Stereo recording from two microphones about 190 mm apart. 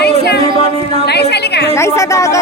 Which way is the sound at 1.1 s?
60° left (ahead or behind).